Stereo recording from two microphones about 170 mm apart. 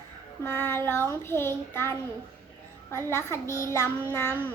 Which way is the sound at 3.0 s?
15° left (ahead or behind).